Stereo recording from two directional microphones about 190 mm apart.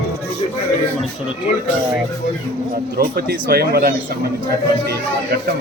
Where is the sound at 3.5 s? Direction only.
55° right (ahead or behind).